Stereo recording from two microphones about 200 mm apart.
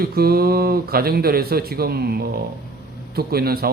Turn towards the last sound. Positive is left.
turn(degrees=-50)  # may be behind; listen again after turning